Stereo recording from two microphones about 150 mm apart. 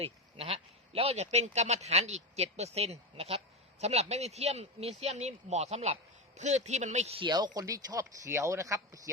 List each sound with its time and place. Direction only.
0.0 s speech: 40° right (ahead or behind)
7.3 s speech: 30° right (ahead or behind)